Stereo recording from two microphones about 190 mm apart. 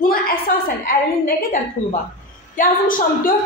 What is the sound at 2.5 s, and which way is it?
Speech, 45° left (ahead or behind).